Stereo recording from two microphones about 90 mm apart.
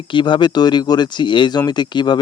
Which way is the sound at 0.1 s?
60° left (ahead or behind).